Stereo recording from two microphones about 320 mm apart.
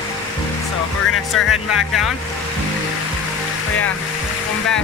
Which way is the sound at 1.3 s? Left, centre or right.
Centre.